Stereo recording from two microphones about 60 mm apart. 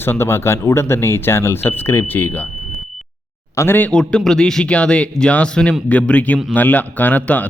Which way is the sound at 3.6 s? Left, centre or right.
Left.